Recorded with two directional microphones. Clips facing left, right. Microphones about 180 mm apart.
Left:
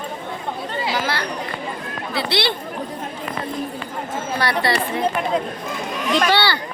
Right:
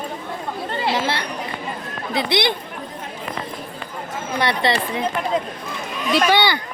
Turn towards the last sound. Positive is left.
turn(degrees=-15)  # may be behind; listen again after turning